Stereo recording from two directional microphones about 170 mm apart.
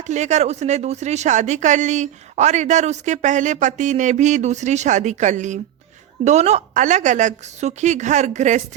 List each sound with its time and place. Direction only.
0.1 s speech: 45° right (ahead or behind)